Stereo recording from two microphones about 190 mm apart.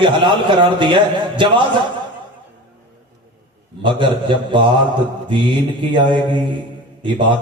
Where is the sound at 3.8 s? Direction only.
25° right (ahead or behind).